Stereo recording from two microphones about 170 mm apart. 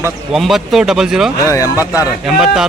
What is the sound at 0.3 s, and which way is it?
Speech, centre (ahead or behind).